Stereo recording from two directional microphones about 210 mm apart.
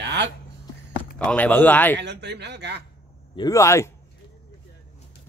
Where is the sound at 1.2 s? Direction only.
5° left (ahead or behind).